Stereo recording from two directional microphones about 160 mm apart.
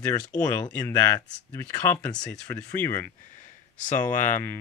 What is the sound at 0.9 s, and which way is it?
Speech, 20° left (ahead or behind).